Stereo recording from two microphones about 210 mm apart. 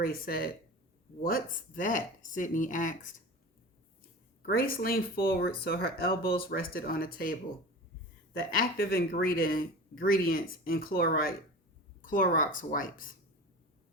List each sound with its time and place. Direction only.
0.0 s speech: 45° left (ahead or behind)
4.4 s speech: 45° left (ahead or behind)
8.4 s speech: 45° left (ahead or behind)